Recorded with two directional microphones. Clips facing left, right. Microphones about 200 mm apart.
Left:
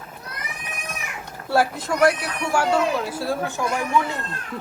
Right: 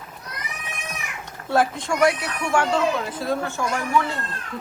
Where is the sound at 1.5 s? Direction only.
5° left (ahead or behind).